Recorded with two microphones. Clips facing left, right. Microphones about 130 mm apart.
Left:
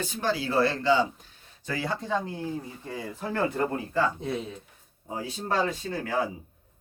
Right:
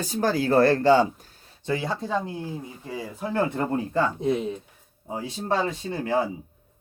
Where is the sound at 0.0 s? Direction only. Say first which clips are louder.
Right 5 dB; 40° right (ahead or behind).